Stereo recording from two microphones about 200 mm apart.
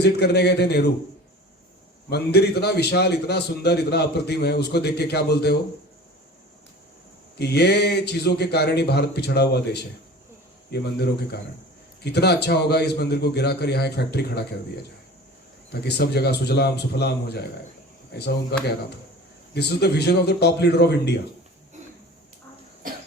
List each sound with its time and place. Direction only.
0.0 s a man's voice: 55° left (ahead or behind)
2.0 s a man's voice: 55° left (ahead or behind)
7.3 s a man's voice: 55° left (ahead or behind)
15.7 s a man's voice: 55° left (ahead or behind)
18.5 s a man's voice: 55° left (ahead or behind)
22.8 s cough: 45° right (ahead or behind)